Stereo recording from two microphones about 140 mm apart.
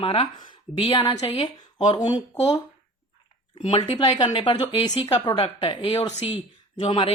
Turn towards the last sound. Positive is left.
turn(degrees=35)  # may be behind; listen again after turning